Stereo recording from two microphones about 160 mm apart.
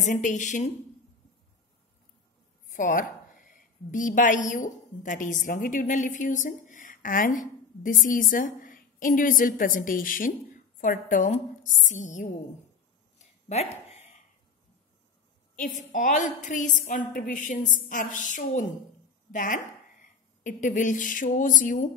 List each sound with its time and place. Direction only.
0.0 s a woman's voice: 50° left (ahead or behind)
2.7 s a woman's voice: 55° left (ahead or behind)
13.5 s a sound: 45° left (ahead or behind)
15.6 s a woman's voice: 55° left (ahead or behind)